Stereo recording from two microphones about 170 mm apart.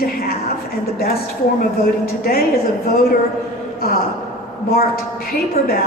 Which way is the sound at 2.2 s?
60° left (ahead or behind).